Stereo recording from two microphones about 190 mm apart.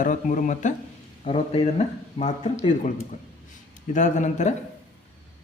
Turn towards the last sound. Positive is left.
turn(degrees=40)  # may be behind; listen again after turning